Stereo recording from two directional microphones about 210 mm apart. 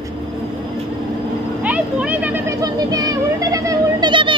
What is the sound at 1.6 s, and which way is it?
Speech, 5° right (ahead or behind).